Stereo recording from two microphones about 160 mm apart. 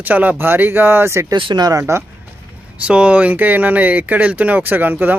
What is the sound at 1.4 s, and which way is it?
Speech, 30° right (ahead or behind).